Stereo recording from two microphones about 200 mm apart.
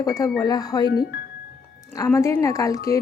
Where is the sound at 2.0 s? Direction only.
15° left (ahead or behind).